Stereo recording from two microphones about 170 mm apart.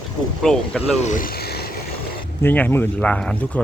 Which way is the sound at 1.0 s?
50° left (ahead or behind).